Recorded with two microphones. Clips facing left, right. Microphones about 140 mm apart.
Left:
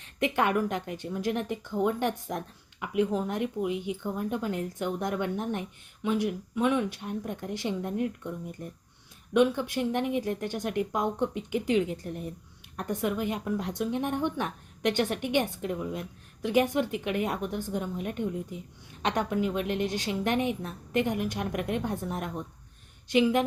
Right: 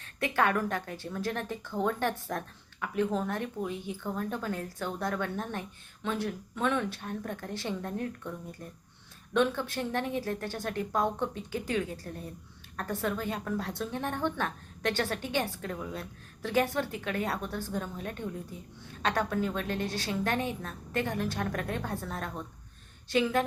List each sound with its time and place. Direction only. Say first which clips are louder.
0.0 s a woman's voice: left 1 dB; 15° left (ahead or behind)
9.3 s a woman's voice: left 4 dB; 15° left (ahead or behind)